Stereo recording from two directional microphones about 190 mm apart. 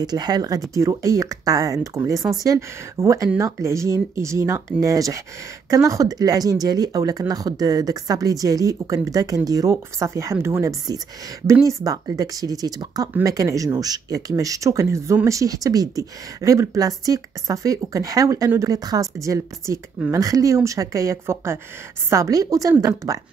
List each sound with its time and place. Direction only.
0.0 s speech: 20° right (ahead or behind)